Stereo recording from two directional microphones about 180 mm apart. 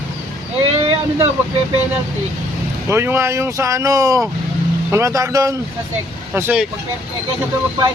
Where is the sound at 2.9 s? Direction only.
15° right (ahead or behind).